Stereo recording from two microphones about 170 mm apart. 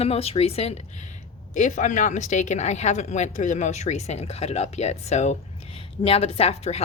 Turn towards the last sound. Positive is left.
turn(degrees=35)  # may be behind; listen again after turning